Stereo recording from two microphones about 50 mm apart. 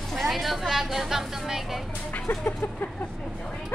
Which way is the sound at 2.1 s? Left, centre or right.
Left.